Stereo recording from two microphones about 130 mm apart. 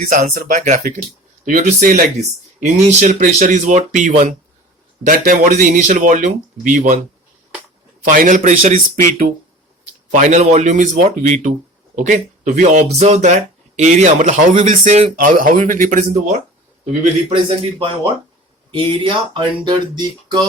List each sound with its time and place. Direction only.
0.3 s speech: 75° right (ahead or behind)
1.5 s speech: 90° right
2.6 s speech: 65° right (ahead or behind)
5.0 s speech: 90° right; by 7.0 s 70° right (ahead or behind)
8.0 s a man's voice: 90° right
9.8 s speech: 70° right (ahead or behind)
17.7 s speech: 45° right (ahead or behind)